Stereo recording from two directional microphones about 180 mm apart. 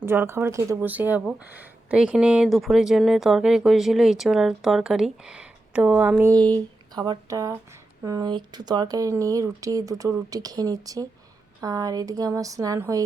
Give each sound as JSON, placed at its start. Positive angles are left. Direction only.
{"t": 0.0, "sound": "speech", "side_deg": -15}
{"t": 6.3, "sound": "speech", "side_deg": -20}